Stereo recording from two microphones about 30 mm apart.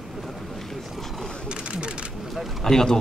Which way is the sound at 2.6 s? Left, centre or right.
Centre.